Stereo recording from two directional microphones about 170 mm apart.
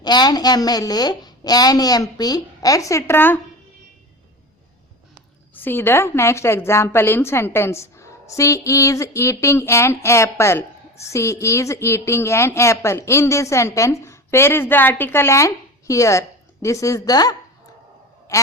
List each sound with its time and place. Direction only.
0.0 s a woman's voice: 25° left (ahead or behind)
5.5 s a woman's voice: 10° left (ahead or behind)
18.3 s a sound: 15° left (ahead or behind)